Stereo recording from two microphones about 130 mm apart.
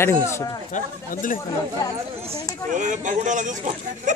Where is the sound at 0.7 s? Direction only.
90° left.